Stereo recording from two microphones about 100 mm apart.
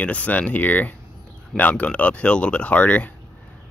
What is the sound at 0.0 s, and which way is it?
Speech, 15° left (ahead or behind).